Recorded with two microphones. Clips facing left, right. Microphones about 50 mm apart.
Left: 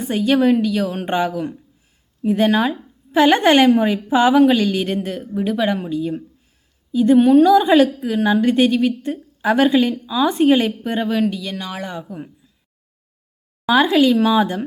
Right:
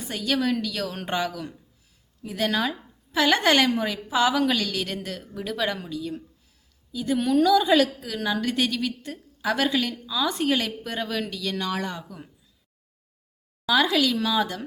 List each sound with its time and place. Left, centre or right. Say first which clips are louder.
0.0 s a woman's voice: left 10 dB; left
13.7 s a woman's voice: left 7 dB; left